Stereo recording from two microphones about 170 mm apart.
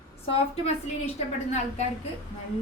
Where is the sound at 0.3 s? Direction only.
40° left (ahead or behind).